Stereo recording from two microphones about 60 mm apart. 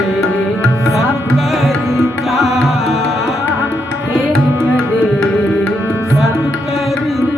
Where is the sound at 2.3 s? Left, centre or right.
Centre.